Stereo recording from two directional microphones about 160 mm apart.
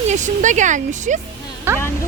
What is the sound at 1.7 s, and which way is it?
Speech, 15° right (ahead or behind).